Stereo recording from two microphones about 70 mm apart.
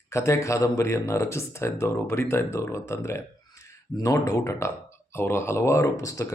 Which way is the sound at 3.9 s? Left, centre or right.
Left.